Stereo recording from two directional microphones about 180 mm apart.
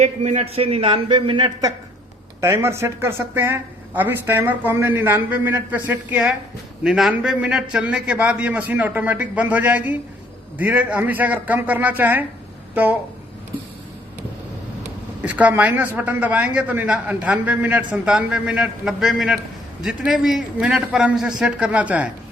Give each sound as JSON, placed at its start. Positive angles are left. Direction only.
{"t": 0.0, "sound": "speech", "side_deg": -40}
{"t": 15.2, "sound": "a man's voice", "side_deg": -10}